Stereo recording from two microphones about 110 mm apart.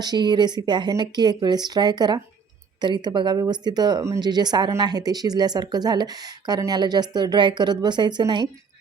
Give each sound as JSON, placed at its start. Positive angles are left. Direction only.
{"t": 0.0, "sound": "speech", "side_deg": -40}